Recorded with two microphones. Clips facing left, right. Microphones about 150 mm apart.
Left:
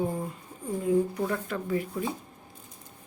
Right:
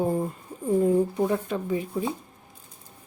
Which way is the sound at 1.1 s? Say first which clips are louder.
Right 5 dB; 20° right (ahead or behind).